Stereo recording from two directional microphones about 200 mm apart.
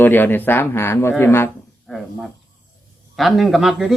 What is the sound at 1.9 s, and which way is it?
A man's voice, centre (ahead or behind).